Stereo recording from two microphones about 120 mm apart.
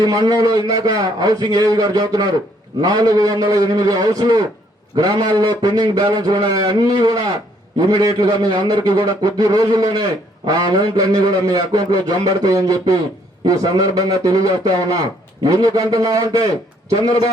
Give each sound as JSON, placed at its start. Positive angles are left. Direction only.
{"t": 0.0, "sound": "a man's voice", "side_deg": -35}